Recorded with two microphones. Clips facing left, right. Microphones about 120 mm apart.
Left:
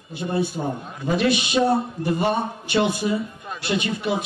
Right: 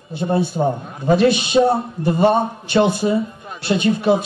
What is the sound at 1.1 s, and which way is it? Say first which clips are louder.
A man's voice: right 6 dB; 30° right (ahead or behind).